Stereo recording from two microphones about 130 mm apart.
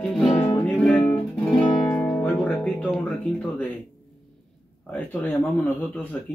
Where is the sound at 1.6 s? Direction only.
35° left (ahead or behind).